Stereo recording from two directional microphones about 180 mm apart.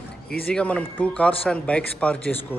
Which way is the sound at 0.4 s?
5° left (ahead or behind).